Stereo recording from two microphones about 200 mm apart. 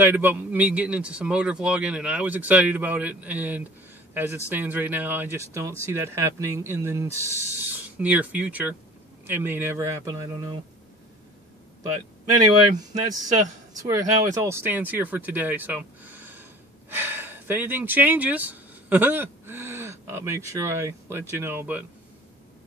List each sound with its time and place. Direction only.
0.0 s speech: 10° right (ahead or behind)
7.2 s speech: 15° left (ahead or behind)
7.6 s speech: 10° right (ahead or behind)
12.7 s speech: 20° right (ahead or behind)